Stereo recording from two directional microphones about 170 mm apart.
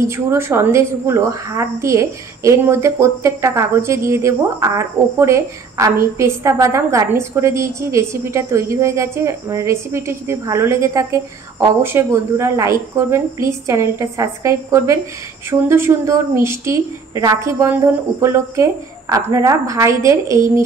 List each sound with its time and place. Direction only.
0.1 s a woman's voice: 15° right (ahead or behind)